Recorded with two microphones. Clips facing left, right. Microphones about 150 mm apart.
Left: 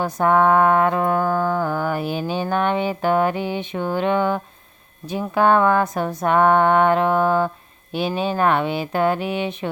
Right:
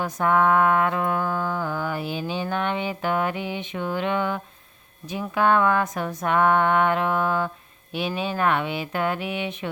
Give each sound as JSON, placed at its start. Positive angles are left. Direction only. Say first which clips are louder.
{"t": 0.0, "sound": "mantra", "louder": "left 4 dB", "side_deg": 35}